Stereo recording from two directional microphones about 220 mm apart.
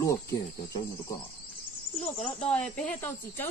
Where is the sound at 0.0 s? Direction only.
15° left (ahead or behind).